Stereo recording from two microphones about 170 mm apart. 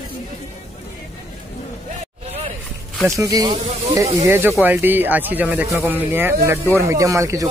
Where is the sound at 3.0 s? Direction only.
20° right (ahead or behind).